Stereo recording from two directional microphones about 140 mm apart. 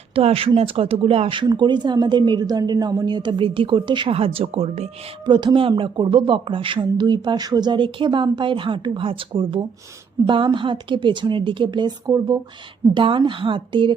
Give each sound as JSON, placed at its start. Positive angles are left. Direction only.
{"t": 0.1, "sound": "speech", "side_deg": -45}
{"t": 5.2, "sound": "speech", "side_deg": -35}